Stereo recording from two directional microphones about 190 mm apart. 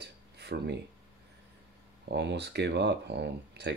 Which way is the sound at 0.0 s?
60° right (ahead or behind).